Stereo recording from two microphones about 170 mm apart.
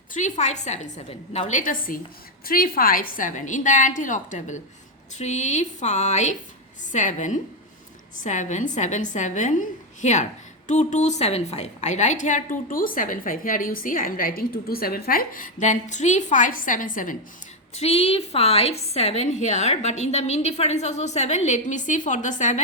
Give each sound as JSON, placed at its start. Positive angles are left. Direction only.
{"t": 0.1, "sound": "a woman's voice", "side_deg": 45}
{"t": 17.7, "sound": "a woman's voice", "side_deg": 35}